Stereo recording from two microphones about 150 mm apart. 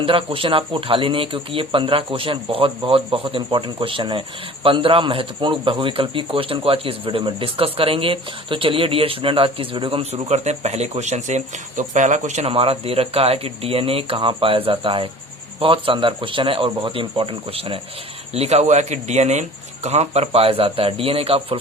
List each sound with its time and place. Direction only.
0.0 s a man's voice: 35° right (ahead or behind)